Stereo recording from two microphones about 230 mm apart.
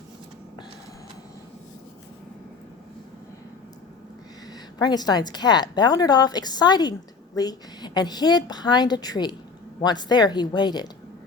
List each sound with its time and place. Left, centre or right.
4.8 s a woman's voice: centre